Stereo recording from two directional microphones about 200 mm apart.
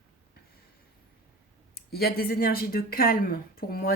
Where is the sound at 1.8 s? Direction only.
50° left (ahead or behind).